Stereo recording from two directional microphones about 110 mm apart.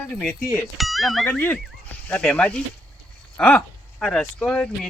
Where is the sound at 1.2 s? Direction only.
15° left (ahead or behind).